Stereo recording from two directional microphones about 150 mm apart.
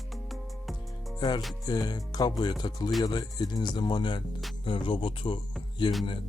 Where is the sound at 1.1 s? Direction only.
30° left (ahead or behind).